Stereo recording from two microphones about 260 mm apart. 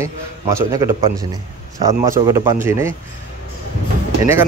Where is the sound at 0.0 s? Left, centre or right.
Centre.